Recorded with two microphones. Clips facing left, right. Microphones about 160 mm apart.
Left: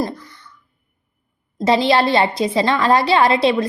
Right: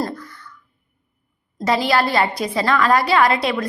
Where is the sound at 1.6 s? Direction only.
25° left (ahead or behind).